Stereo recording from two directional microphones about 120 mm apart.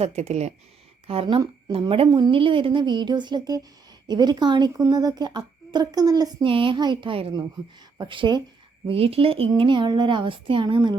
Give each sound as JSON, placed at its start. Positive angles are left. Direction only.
{"t": 0.0, "sound": "speech", "side_deg": -65}
{"t": 1.0, "sound": "a woman's voice", "side_deg": -50}
{"t": 6.4, "sound": "a woman's voice", "side_deg": -45}
{"t": 9.5, "sound": "a woman's voice", "side_deg": -40}